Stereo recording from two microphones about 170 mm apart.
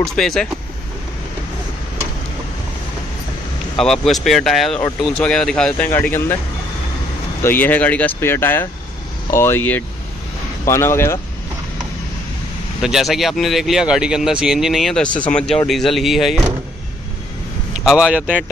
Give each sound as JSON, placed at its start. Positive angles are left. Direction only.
{"t": 0.0, "sound": "speech", "side_deg": 0}
{"t": 3.8, "sound": "speech", "side_deg": 5}
{"t": 7.4, "sound": "speech", "side_deg": 10}
{"t": 12.8, "sound": "speech", "side_deg": 0}
{"t": 17.8, "sound": "speech", "side_deg": -5}